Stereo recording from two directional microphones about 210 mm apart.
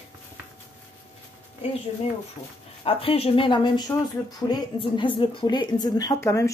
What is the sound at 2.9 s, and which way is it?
A woman's voice, 25° left (ahead or behind).